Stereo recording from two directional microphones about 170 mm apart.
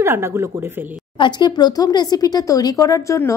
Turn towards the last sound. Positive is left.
turn(degrees=20)  # may be behind; listen again after turning